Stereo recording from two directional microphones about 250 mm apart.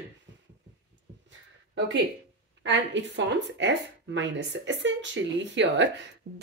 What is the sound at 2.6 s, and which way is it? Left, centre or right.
Speech, right.